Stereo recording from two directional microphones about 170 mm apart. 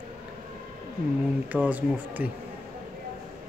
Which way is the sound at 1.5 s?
10° right (ahead or behind).